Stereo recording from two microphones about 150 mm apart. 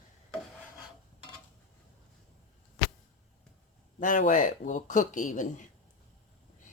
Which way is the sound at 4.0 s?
60° left (ahead or behind).